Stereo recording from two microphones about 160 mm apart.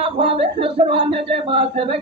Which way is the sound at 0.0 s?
35° right (ahead or behind).